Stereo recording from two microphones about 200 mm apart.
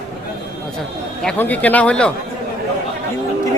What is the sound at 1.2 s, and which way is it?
Speech, 5° left (ahead or behind).